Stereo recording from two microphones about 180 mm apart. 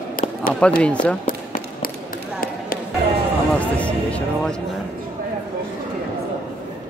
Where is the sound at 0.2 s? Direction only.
50° left (ahead or behind).